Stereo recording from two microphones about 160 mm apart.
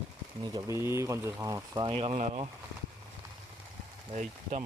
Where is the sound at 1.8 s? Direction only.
35° right (ahead or behind).